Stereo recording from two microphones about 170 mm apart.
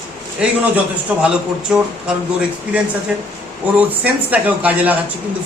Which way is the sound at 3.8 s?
10° right (ahead or behind).